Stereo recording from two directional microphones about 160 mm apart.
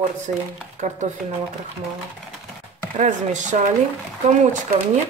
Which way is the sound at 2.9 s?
50° right (ahead or behind).